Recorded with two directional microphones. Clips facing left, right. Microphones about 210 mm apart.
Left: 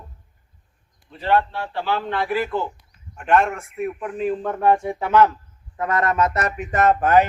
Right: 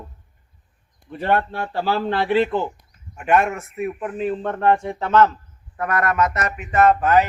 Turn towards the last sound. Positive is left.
turn(degrees=50)  # may be behind; listen again after turning